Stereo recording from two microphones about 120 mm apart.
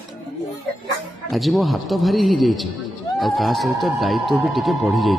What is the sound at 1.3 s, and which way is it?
Speech, centre (ahead or behind).